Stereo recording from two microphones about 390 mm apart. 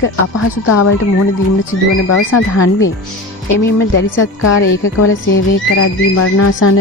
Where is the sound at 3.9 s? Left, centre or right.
Left.